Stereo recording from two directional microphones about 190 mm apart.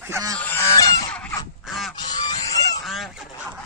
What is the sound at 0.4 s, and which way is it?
Goose, 10° left (ahead or behind).